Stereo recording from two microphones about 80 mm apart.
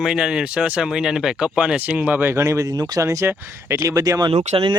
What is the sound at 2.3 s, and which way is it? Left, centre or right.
Speech, right.